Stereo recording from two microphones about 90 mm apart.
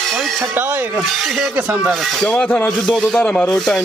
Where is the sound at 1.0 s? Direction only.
Centre (ahead or behind).